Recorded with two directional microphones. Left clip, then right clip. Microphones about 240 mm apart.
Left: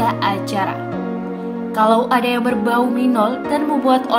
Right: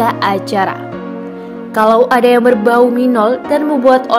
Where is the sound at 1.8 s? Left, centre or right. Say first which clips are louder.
Right 6 dB; right.